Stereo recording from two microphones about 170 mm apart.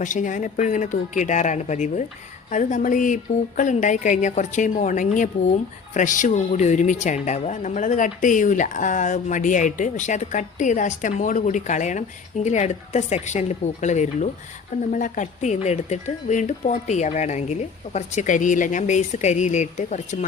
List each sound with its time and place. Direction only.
0.0 s speech: 50° left (ahead or behind)